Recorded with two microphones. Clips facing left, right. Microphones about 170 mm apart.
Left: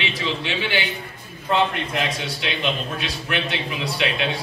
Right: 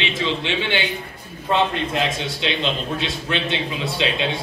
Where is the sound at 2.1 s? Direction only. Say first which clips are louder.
Right 3 dB; 20° right (ahead or behind).